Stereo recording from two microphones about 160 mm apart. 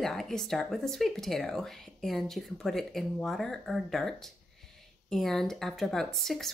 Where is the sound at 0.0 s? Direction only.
Centre (ahead or behind).